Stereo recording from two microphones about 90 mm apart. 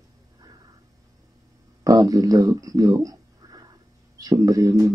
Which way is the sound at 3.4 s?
45° right (ahead or behind).